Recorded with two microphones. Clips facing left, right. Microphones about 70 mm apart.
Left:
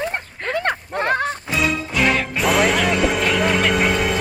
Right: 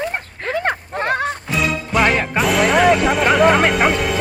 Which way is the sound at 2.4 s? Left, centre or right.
Centre.